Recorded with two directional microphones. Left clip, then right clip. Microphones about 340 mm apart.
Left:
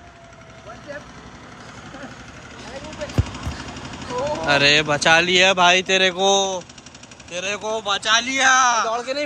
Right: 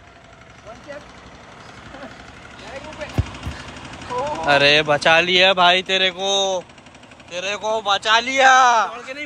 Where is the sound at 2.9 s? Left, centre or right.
Centre.